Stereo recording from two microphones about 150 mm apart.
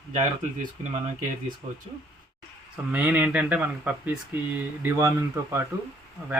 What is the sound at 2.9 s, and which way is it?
Speech, 10° right (ahead or behind).